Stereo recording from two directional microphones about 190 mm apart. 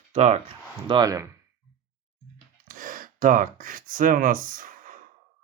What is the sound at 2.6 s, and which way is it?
Speech, 45° right (ahead or behind).